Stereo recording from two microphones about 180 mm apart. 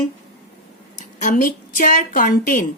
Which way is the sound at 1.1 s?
45° left (ahead or behind).